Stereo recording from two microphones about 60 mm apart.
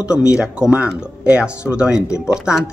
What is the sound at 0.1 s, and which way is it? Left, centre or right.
Speech, centre.